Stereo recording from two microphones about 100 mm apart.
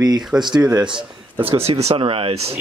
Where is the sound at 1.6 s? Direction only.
90° right.